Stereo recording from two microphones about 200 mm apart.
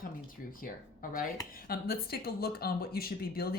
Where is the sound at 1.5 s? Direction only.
50° left (ahead or behind).